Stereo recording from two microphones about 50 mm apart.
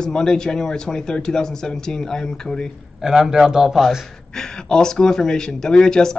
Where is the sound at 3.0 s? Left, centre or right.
Centre.